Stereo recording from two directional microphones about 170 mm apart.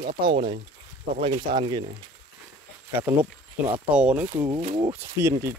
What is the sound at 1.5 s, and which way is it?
Speech, 50° right (ahead or behind).